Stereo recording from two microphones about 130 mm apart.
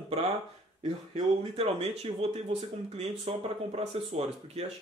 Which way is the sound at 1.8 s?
55° right (ahead or behind).